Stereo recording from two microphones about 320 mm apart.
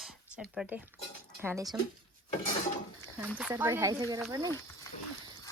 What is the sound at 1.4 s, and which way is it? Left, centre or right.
Speech, centre.